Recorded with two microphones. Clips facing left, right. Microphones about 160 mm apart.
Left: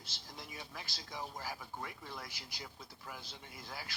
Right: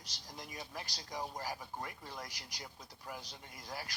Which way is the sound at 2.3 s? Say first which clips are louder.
Left 1 dB; 5° left (ahead or behind).